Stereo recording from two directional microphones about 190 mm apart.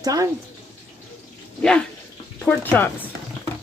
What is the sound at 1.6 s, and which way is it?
Speech, 5° left (ahead or behind).